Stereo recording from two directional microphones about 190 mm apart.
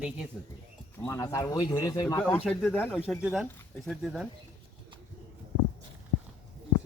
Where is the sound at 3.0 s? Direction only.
5° right (ahead or behind).